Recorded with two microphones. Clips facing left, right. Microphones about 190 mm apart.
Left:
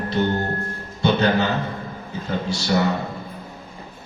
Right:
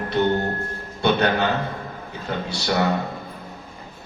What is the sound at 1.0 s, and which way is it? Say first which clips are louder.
Speech: left 1 dB; 60° right (ahead or behind).